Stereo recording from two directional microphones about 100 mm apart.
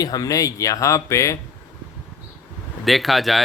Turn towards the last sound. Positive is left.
turn(degrees=0)  # may be behind; listen again after turning